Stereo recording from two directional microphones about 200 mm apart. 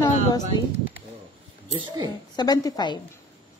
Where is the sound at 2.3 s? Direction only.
20° left (ahead or behind).